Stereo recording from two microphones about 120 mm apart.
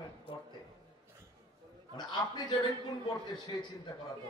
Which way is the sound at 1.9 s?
40° left (ahead or behind).